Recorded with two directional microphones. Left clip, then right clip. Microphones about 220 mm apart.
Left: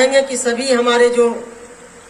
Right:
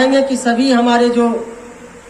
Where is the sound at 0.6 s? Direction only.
55° left (ahead or behind).